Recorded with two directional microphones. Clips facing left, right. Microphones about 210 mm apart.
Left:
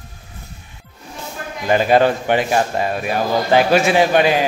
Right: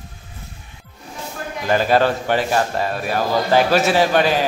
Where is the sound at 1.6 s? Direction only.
15° left (ahead or behind).